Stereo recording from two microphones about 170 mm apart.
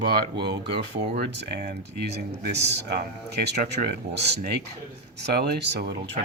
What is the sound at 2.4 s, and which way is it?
Speech, 80° right.